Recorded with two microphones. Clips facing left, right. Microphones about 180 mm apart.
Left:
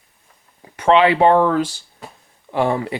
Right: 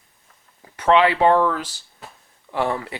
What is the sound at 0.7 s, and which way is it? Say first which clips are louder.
Speech: left 3 dB; 15° left (ahead or behind).